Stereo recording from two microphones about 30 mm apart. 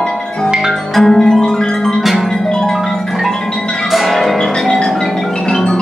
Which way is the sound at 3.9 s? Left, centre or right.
Centre.